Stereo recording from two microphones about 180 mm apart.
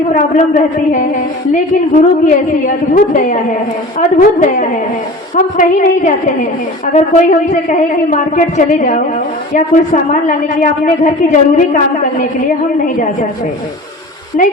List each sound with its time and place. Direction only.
0.1 s a woman's voice: 45° left (ahead or behind)